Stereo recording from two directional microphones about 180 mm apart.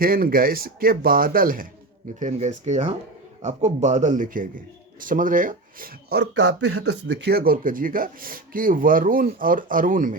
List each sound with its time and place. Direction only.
0.0 s speech: 55° right (ahead or behind)